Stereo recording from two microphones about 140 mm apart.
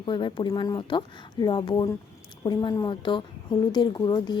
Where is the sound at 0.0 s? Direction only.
35° left (ahead or behind).